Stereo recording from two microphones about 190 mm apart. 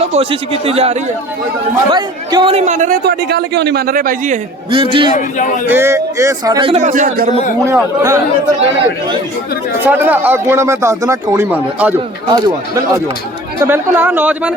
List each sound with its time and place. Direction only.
0.1 s speech: 30° right (ahead or behind)
3.0 s speech: 60° right (ahead or behind)
4.7 s a man's voice: 25° right (ahead or behind)
5.1 s speech: 40° left (ahead or behind)
5.6 s a man's voice: 10° right (ahead or behind); by 7.3 s 40° right (ahead or behind)
7.6 s speech: 15° right (ahead or behind)
9.8 s speech: 10° right (ahead or behind)
12.3 s a man's voice: 20° right (ahead or behind)